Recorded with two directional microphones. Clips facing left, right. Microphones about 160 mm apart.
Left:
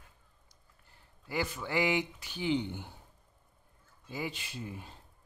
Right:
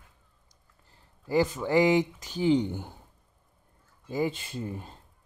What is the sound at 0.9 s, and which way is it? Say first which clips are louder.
Speech: right 11 dB; 35° right (ahead or behind).